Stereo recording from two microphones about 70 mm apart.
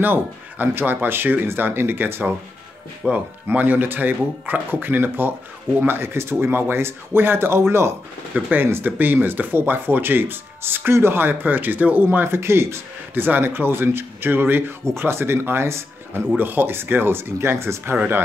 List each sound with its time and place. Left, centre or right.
0.0 s speech: right
3.0 s speech: right